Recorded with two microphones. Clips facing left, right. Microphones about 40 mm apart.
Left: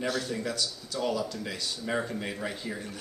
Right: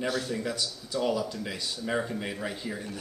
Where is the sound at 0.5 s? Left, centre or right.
Centre.